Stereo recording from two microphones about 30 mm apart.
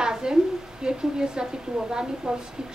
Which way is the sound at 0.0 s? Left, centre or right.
Right.